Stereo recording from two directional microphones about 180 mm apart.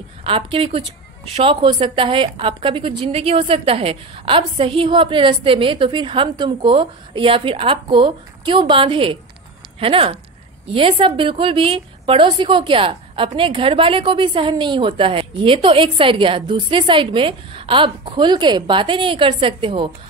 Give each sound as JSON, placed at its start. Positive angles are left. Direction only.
{"t": 0.2, "sound": "a woman's voice", "side_deg": -30}